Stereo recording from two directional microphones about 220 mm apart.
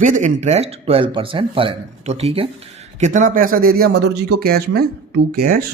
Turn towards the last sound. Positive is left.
turn(degrees=-45)  # may be behind; listen again after turning